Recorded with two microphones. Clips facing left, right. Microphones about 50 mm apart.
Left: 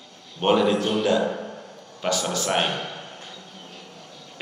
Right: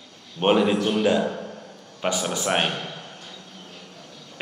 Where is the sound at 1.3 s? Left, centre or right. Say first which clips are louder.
Left 1 dB; centre.